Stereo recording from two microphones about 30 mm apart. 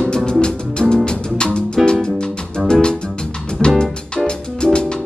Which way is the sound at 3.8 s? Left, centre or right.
Left.